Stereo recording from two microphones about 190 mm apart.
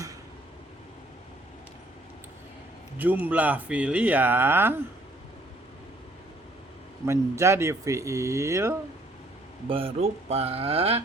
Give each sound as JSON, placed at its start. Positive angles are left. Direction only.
{"t": 3.0, "sound": "speech", "side_deg": -10}
{"t": 7.0, "sound": "speech", "side_deg": -15}
{"t": 9.6, "sound": "speech", "side_deg": -30}